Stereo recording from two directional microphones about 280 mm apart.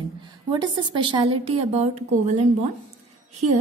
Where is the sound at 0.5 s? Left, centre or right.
Centre.